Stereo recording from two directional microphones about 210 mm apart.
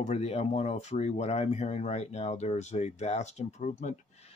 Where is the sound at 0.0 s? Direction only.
30° left (ahead or behind).